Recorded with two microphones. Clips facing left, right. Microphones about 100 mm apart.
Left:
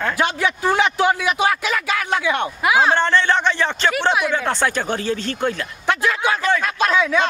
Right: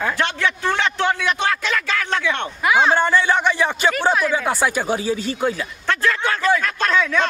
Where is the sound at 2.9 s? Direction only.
10° right (ahead or behind).